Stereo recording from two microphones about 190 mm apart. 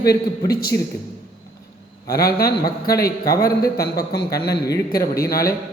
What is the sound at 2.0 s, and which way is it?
Speech, 55° left (ahead or behind).